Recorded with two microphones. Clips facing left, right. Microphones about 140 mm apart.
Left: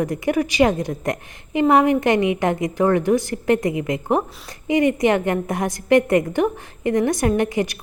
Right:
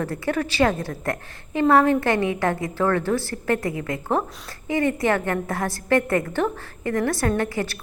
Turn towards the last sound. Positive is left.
turn(degrees=15)  # may be behind; listen again after turning